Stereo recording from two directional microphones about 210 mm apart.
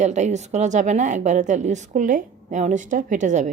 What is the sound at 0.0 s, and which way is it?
A woman's voice, 35° right (ahead or behind).